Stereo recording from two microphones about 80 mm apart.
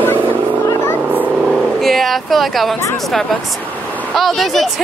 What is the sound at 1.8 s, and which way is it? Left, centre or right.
Speech, centre.